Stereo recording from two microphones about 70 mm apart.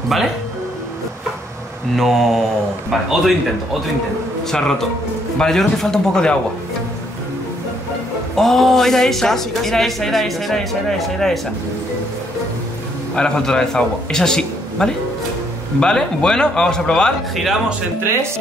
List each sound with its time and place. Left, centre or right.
2.0 s speech: centre
4.5 s speech: centre
8.4 s speech: centre
13.1 s a man's voice: centre